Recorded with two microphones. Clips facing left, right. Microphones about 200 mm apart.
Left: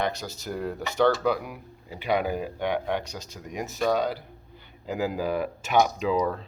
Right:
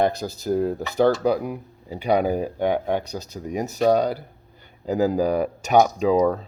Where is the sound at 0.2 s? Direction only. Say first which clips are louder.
Right 9 dB; 35° right (ahead or behind).